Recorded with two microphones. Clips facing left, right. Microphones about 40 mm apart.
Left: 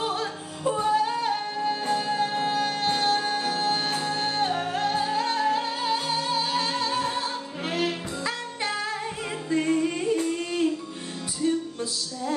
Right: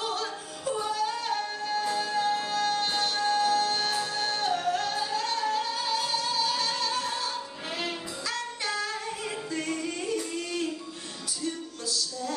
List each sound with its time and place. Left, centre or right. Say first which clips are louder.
0.0 s music: left 3 dB; left
8.3 s music: left 1 dB; left